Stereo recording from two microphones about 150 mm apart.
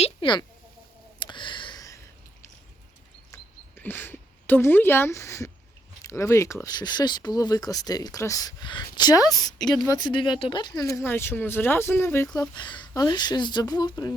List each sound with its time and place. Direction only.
0.0 s speech: 35° left (ahead or behind)
1.2 s a sound: 35° left (ahead or behind)
3.8 s speech: 15° left (ahead or behind)
9.6 s speech: 5° left (ahead or behind)
9.9 s speech: 30° left (ahead or behind)